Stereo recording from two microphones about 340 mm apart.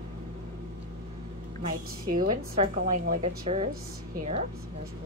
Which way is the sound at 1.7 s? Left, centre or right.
Centre.